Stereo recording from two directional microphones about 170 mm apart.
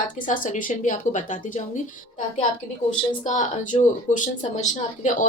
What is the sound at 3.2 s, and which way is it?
Speech, 50° left (ahead or behind).